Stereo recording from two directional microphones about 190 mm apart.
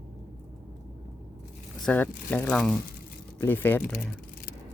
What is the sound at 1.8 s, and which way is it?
Speech, 10° left (ahead or behind).